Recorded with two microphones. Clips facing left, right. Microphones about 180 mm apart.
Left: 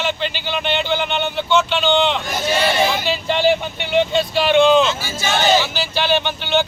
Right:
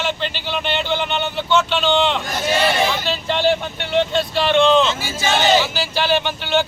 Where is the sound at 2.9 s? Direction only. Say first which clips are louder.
Left 2 dB; 5° left (ahead or behind).